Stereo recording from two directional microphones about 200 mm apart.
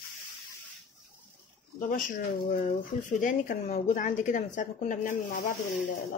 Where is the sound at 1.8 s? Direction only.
45° left (ahead or behind).